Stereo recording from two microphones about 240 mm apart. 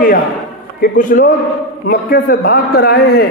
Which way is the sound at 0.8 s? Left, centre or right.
Left.